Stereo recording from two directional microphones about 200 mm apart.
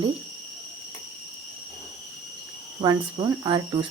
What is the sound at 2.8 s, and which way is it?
Speech, 20° right (ahead or behind).